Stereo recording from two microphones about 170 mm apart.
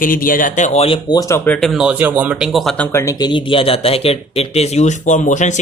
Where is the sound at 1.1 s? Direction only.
20° left (ahead or behind).